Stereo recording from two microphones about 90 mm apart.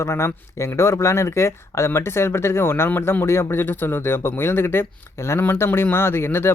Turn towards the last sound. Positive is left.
turn(degrees=25)  # may be behind; listen again after turning